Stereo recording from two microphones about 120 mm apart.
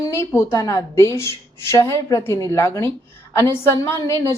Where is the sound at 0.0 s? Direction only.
25° left (ahead or behind).